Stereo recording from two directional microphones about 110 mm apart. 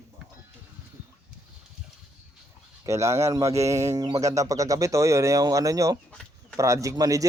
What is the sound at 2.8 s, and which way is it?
Speech, 25° right (ahead or behind).